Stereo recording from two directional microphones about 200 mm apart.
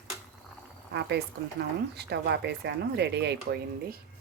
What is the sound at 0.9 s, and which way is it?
Speech, 55° right (ahead or behind).